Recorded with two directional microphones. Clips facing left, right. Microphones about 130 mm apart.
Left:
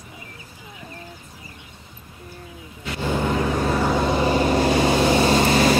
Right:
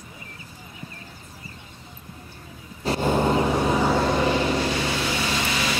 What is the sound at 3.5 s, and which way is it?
Vehicle, 15° right (ahead or behind).